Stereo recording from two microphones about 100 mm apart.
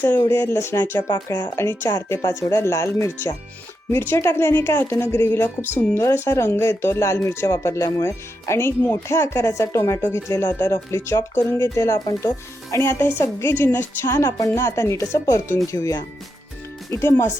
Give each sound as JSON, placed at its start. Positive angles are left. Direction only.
{"t": 0.0, "sound": "a woman's voice", "side_deg": 20}
{"t": 0.9, "sound": "speech", "side_deg": 40}
{"t": 1.5, "sound": "a woman's voice", "side_deg": 25}